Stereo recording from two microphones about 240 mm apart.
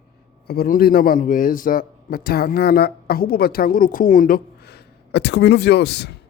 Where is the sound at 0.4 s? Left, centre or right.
Left.